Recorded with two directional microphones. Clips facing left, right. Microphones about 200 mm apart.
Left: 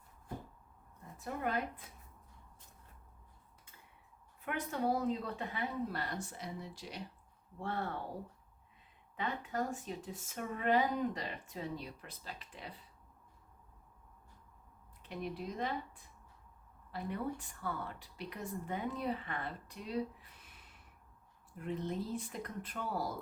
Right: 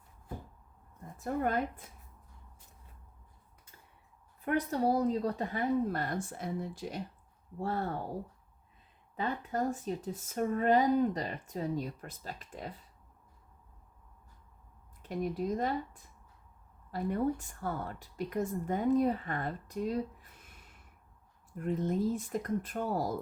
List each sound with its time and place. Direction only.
1.2 s a woman's voice: 45° right (ahead or behind)
4.4 s a woman's voice: 35° right (ahead or behind)
7.6 s speech: 40° right (ahead or behind)
9.1 s speech: 35° right (ahead or behind)
15.0 s a woman's voice: 45° right (ahead or behind)